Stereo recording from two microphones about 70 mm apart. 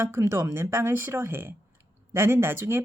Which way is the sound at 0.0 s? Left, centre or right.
Right.